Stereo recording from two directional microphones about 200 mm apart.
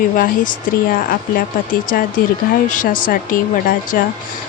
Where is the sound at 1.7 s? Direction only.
45° left (ahead or behind).